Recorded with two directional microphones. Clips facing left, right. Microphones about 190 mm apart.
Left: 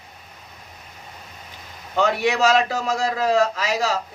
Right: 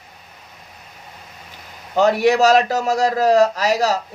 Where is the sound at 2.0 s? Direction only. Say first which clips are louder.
Right 5 dB; 40° right (ahead or behind).